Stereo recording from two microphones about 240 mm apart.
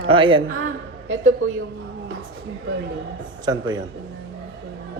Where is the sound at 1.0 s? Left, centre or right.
Right.